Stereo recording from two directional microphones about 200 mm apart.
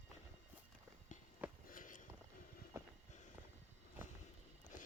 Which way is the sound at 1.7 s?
40° left (ahead or behind).